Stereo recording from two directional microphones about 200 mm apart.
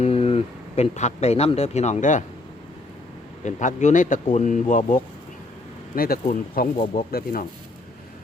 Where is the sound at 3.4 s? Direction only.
40° left (ahead or behind).